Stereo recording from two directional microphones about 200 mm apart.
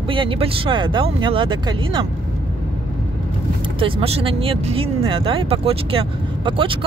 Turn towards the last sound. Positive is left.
turn(degrees=-25)  # may be behind; listen again after turning